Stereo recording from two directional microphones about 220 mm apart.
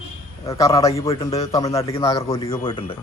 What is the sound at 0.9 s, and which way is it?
A man's voice, 25° left (ahead or behind).